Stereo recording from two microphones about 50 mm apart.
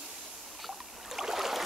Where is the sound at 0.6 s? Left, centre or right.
Centre.